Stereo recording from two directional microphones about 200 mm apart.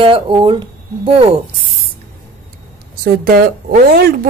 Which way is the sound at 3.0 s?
50° right (ahead or behind).